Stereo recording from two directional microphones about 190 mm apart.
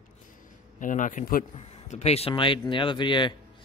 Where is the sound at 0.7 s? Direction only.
45° left (ahead or behind).